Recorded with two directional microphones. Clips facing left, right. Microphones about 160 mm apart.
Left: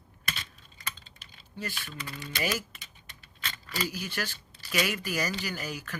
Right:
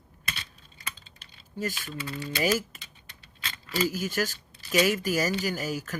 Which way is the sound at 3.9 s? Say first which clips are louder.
Right 7 dB; 45° right (ahead or behind).